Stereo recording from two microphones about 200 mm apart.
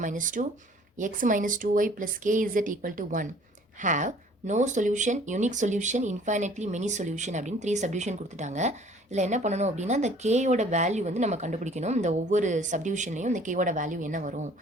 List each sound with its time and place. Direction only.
0.0 s speech: 40° right (ahead or behind)